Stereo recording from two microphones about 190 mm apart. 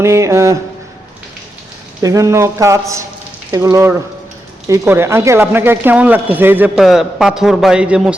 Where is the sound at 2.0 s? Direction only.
15° right (ahead or behind).